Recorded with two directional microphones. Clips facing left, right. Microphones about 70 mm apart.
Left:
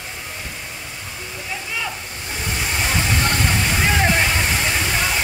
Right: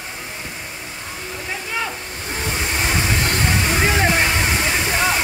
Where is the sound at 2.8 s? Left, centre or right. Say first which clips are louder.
Left 1 dB; centre.